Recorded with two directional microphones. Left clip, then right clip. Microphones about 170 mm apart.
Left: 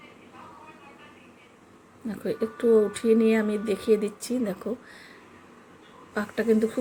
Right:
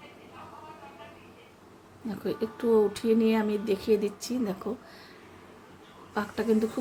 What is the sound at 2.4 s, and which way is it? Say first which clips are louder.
Speech: left 3 dB; 5° left (ahead or behind).